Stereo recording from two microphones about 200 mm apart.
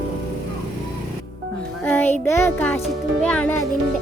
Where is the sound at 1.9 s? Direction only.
10° left (ahead or behind).